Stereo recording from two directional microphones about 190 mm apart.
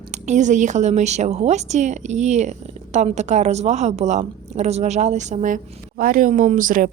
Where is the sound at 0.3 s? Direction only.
40° right (ahead or behind).